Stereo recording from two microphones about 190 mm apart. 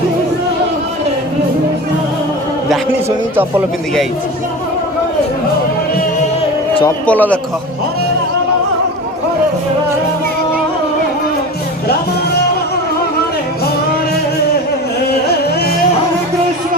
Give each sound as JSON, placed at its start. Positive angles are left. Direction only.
{"t": 7.0, "sound": "a man's voice", "side_deg": 5}
{"t": 15.0, "sound": "carnatic music", "side_deg": 55}